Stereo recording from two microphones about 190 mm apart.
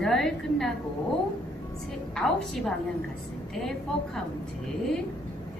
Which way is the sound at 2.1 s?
Centre (ahead or behind).